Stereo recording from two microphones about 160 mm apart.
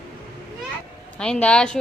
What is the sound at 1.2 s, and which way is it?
Speech, 5° left (ahead or behind).